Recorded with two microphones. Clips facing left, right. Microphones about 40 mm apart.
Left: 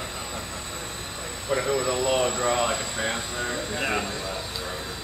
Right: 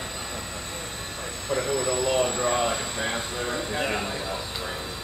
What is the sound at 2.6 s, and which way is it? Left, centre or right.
Speech, centre.